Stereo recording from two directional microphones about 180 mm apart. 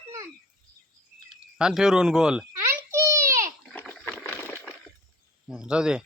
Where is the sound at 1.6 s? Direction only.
5° right (ahead or behind).